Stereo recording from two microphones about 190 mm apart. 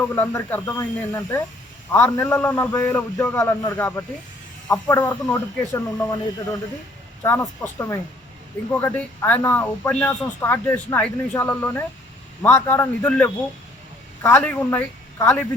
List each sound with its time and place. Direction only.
0.0 s speech: 10° left (ahead or behind)